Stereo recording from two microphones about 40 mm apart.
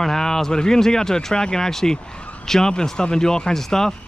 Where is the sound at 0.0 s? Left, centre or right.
Centre.